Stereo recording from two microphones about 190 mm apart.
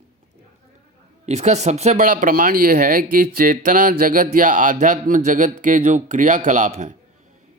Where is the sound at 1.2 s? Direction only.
35° right (ahead or behind).